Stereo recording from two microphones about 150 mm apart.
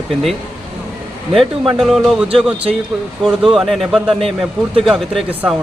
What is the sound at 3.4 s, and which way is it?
A man's voice, centre (ahead or behind).